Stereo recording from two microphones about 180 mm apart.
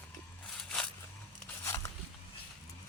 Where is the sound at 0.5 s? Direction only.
5° left (ahead or behind).